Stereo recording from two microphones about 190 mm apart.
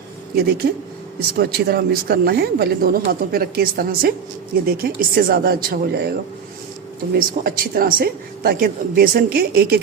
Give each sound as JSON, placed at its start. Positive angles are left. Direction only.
{"t": 0.3, "sound": "speech", "side_deg": -55}